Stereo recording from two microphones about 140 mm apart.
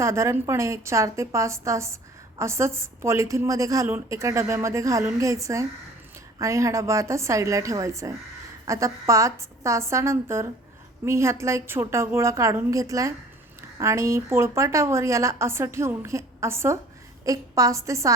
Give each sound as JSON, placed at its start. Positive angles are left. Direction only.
{"t": 0.0, "sound": "a woman's voice", "side_deg": -20}